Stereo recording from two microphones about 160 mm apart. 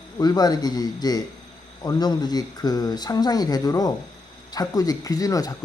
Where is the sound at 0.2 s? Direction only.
25° left (ahead or behind).